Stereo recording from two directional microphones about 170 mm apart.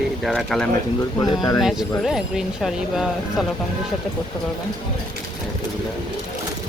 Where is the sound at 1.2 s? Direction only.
20° left (ahead or behind).